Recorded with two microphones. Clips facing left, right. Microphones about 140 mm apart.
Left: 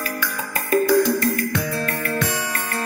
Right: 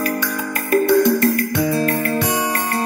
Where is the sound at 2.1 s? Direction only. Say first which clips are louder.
Right 4 dB; 20° right (ahead or behind).